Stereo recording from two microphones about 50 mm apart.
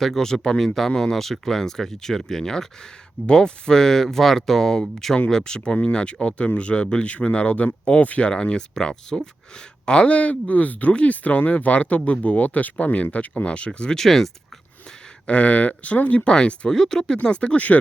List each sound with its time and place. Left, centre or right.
0.0 s speech: centre
14.0 s speech: centre
15.3 s speech: left